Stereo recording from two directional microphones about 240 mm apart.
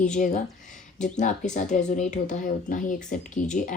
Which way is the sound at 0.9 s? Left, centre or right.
Left.